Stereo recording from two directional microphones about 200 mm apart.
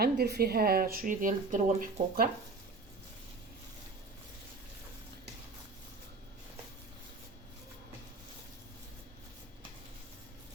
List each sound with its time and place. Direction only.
0.0 s speech: 55° right (ahead or behind)